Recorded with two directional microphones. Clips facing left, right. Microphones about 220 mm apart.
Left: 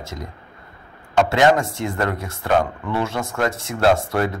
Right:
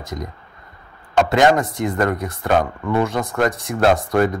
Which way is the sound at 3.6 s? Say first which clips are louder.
Right 1 dB; 50° right (ahead or behind).